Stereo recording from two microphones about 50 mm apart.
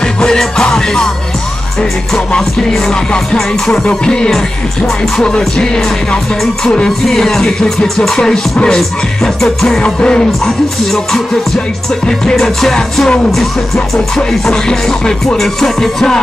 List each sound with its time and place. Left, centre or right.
0.0 s music: centre
7.1 s music: centre